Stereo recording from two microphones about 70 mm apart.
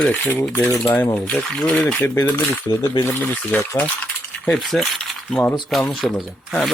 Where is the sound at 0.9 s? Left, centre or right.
Left.